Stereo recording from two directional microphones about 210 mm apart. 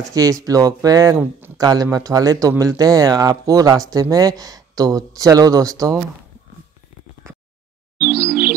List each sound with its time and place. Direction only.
0.1 s speech: 15° right (ahead or behind)
8.3 s music: 45° right (ahead or behind)